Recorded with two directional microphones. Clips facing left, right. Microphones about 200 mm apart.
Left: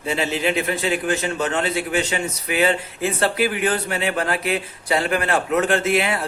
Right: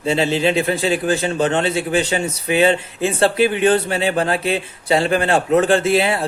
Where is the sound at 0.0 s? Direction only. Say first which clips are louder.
Right 5 dB; 30° right (ahead or behind).